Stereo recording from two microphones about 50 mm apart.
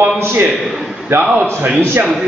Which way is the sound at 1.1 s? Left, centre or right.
Right.